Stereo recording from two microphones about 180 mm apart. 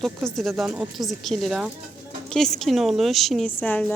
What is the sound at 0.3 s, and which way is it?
A woman's voice, centre (ahead or behind).